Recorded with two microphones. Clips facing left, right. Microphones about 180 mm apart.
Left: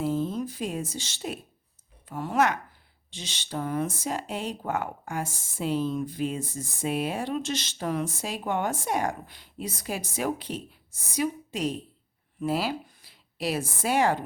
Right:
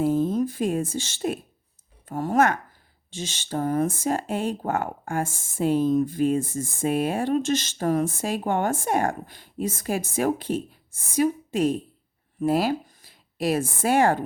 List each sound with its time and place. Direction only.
0.0 s speech: 50° right (ahead or behind)